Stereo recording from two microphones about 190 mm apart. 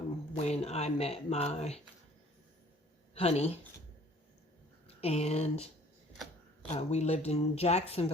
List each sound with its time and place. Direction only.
0.3 s speech: 35° left (ahead or behind)
3.2 s speech: 35° left (ahead or behind)
4.9 s speech: 35° left (ahead or behind)
6.7 s speech: 35° left (ahead or behind)